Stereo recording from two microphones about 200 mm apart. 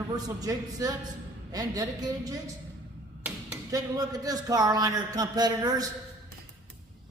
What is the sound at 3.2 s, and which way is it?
Tap, 10° right (ahead or behind).